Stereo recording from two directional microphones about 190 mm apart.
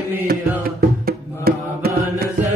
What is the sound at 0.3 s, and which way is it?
Music, 50° right (ahead or behind).